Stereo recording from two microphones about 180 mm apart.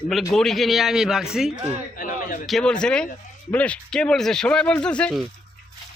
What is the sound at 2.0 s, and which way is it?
Speech, 50° left (ahead or behind).